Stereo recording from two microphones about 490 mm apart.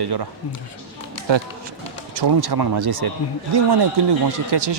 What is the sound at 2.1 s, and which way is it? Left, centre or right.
A man's voice, right.